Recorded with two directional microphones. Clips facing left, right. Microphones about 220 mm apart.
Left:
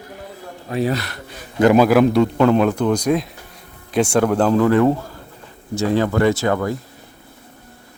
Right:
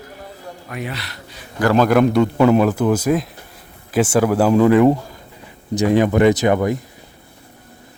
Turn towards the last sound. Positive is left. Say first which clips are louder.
# right 3 dB
turn(degrees=-20)  # may be behind; listen again after turning